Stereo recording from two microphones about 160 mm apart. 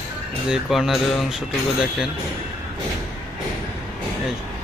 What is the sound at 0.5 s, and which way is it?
Music, 5° right (ahead or behind).